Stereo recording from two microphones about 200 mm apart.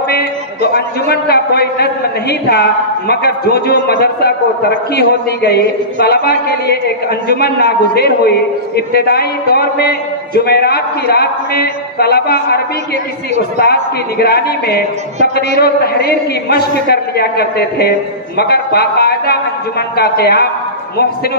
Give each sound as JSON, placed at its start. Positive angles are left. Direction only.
{"t": 0.1, "sound": "a man's voice", "side_deg": 55}